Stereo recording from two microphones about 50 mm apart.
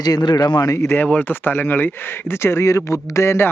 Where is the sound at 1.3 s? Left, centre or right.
Left.